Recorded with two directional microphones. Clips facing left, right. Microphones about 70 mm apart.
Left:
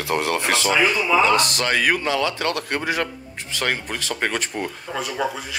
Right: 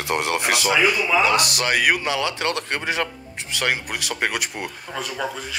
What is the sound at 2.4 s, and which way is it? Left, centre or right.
Speech, right.